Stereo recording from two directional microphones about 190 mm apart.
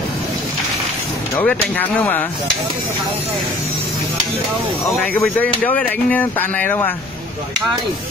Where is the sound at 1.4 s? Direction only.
10° left (ahead or behind).